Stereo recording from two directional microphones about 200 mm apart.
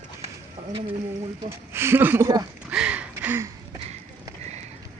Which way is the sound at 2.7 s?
5° right (ahead or behind).